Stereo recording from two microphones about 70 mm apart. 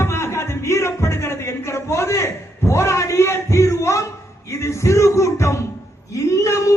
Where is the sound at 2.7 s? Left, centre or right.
Left.